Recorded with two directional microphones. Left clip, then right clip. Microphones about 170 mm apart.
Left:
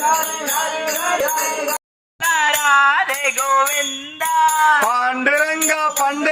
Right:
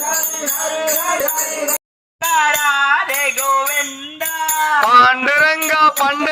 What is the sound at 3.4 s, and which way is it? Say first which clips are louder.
Jingle bell: left 1 dB; 15° left (ahead or behind).